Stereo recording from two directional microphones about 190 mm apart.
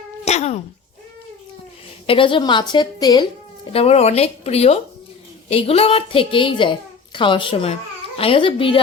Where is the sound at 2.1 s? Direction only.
25° left (ahead or behind).